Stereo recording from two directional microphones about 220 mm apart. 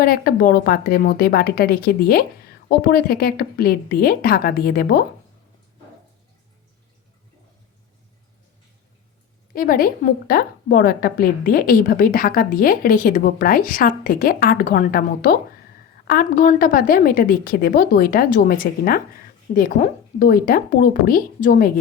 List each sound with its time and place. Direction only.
0.0 s a woman's voice: 45° left (ahead or behind)
9.5 s a woman's voice: 40° left (ahead or behind)